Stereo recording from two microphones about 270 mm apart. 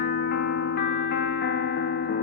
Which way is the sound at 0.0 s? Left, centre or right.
Left.